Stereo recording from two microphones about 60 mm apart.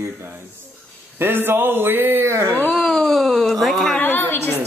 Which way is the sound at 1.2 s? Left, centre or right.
Right.